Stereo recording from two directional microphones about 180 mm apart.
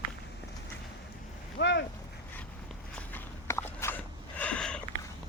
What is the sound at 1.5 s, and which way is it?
Boat, 70° left (ahead or behind).